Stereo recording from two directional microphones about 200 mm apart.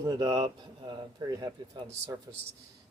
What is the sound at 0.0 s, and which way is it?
Speech, 20° right (ahead or behind).